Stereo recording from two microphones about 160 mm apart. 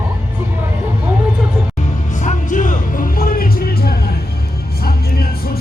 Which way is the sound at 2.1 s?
50° left (ahead or behind).